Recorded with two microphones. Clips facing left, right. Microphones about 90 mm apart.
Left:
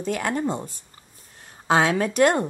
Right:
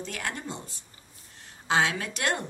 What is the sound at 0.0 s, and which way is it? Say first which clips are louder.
A woman's voice: left 10 dB; 40° left (ahead or behind).